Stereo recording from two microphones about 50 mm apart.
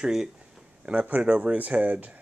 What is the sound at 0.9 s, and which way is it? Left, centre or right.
Speech, right.